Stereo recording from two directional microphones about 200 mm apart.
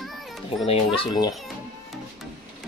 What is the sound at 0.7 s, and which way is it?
Speech, 25° left (ahead or behind).